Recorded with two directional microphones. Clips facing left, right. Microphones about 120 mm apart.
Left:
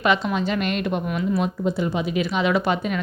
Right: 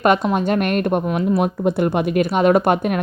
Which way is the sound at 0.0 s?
50° right (ahead or behind).